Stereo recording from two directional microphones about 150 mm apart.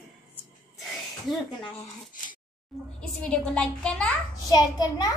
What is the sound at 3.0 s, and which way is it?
A child's voice, 5° left (ahead or behind).